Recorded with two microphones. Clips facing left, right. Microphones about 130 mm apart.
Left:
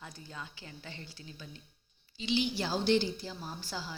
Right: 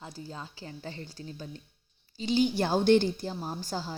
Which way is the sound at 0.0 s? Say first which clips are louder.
Right 5 dB; 30° right (ahead or behind).